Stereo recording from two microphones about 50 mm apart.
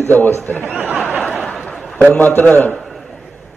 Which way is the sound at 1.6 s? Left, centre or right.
Centre.